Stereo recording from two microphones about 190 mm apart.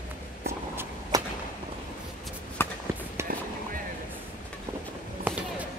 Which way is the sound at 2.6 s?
10° left (ahead or behind).